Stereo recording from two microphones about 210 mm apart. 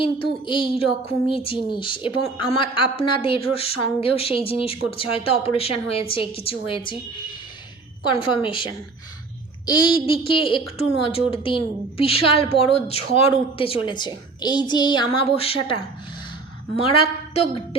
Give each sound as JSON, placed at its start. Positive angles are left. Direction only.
{"t": 0.0, "sound": "a woman's voice", "side_deg": 25}
{"t": 9.6, "sound": "a woman's voice", "side_deg": 25}